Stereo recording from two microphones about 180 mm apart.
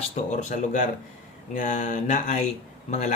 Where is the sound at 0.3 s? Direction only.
40° left (ahead or behind).